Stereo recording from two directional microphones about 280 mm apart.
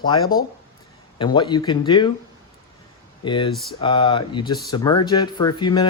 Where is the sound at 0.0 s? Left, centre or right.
Centre.